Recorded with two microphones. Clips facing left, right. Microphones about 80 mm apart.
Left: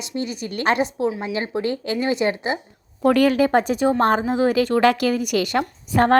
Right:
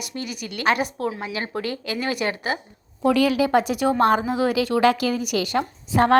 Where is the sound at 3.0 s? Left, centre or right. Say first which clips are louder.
Left 3 dB; left.